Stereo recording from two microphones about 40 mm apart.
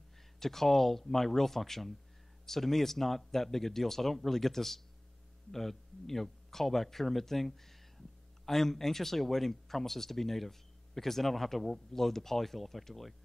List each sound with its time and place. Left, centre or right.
0.4 s speech: centre